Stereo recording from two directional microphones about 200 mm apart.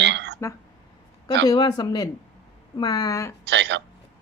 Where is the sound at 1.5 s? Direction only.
20° left (ahead or behind).